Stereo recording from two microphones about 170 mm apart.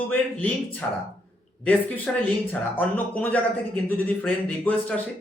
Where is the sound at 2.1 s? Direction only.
5° left (ahead or behind).